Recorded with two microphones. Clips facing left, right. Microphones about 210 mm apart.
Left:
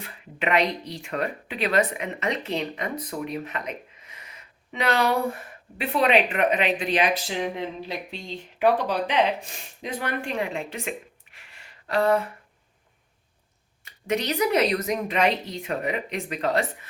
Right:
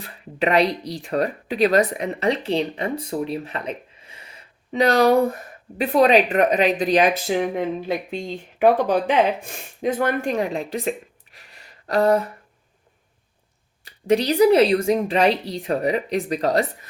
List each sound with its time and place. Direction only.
0.0 s speech: 35° right (ahead or behind)
13.8 s speech: 35° right (ahead or behind)